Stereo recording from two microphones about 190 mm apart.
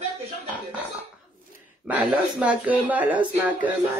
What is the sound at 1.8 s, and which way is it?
Speech, 10° right (ahead or behind).